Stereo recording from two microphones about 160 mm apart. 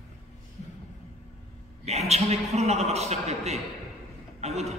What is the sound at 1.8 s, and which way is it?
A man's voice, 40° right (ahead or behind).